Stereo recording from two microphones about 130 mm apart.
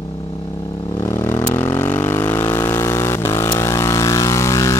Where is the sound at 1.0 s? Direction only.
20° left (ahead or behind).